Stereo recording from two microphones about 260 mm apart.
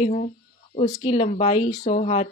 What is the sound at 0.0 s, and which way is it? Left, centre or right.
Speech, left.